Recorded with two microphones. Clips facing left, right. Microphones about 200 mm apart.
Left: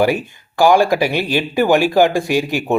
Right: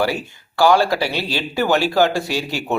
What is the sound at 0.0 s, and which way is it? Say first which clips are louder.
Speech: left 5 dB; 15° left (ahead or behind).